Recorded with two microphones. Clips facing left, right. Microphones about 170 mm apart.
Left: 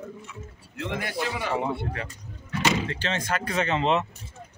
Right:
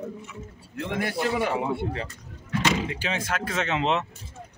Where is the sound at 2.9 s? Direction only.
10° right (ahead or behind).